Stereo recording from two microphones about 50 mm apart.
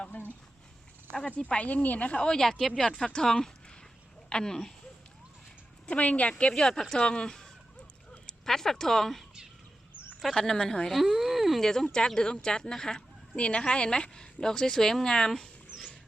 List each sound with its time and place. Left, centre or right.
0.0 s a sound: left
1.4 s speech: centre
1.6 s speech: left
2.2 s speech: centre
6.0 s speech: left
6.5 s speech: centre
10.3 s speech: centre
10.9 s speech: centre